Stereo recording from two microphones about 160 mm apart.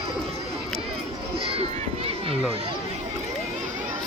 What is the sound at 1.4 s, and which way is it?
Children playing, 35° right (ahead or behind).